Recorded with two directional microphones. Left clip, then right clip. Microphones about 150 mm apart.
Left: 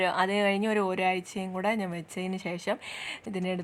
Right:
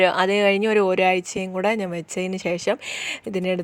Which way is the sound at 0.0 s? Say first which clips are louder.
Right 8 dB; 35° right (ahead or behind).